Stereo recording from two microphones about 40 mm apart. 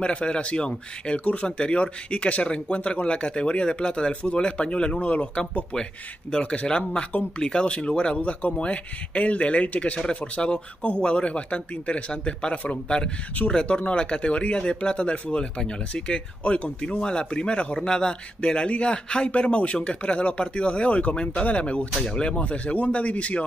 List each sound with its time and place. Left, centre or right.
0.0 s a man's voice: left
22.0 s a man's voice: left
22.3 s speech: left